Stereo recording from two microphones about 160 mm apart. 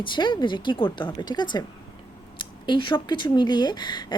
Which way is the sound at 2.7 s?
30° left (ahead or behind).